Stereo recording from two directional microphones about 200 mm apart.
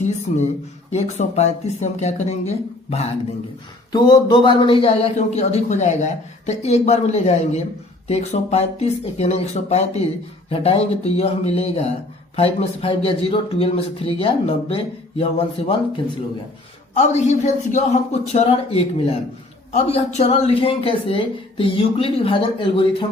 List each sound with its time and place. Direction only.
0.0 s speech: 35° left (ahead or behind)
3.9 s speech: 20° left (ahead or behind)
16.9 s speech: 35° left (ahead or behind)